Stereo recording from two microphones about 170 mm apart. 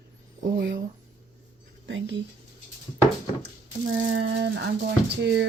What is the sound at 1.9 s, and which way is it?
Speech, 90° right.